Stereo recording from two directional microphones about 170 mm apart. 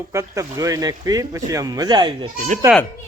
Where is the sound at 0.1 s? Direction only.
15° right (ahead or behind).